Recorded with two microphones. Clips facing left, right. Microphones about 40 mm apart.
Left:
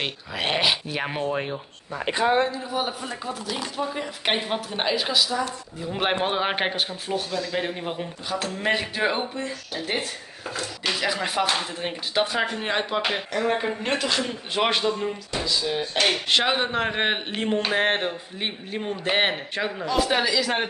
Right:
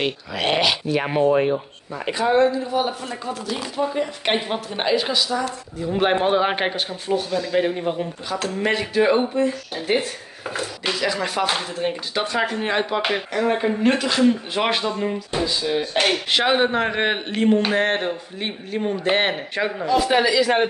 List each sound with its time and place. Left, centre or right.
0.0 s speech: centre
1.0 s speech: centre
2.4 s speech: centre
9.8 s speech: centre
11.0 s speech: centre
15.3 s speech: right
16.1 s speech: centre
16.8 s speech: centre